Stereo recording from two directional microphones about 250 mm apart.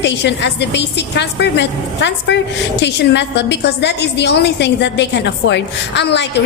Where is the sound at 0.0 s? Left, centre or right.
Left.